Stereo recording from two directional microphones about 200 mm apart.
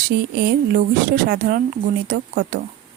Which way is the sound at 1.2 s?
50° right (ahead or behind).